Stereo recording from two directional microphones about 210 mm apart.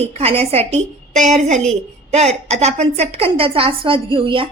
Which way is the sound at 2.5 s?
30° right (ahead or behind).